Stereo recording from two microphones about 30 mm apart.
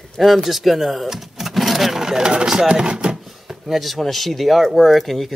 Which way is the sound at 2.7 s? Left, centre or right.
Right.